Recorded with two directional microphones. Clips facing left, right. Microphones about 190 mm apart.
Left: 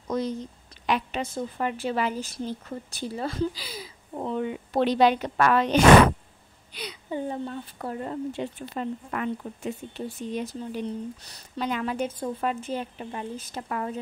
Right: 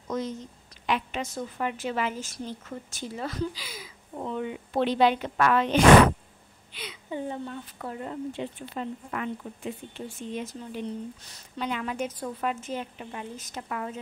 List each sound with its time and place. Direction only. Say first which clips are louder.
0.1 s a woman's voice: left 3 dB; 35° left (ahead or behind)